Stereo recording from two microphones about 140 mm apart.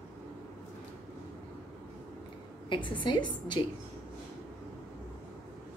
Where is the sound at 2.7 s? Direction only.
35° left (ahead or behind).